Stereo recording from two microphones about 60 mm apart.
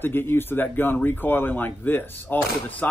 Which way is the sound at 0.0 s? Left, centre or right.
Left.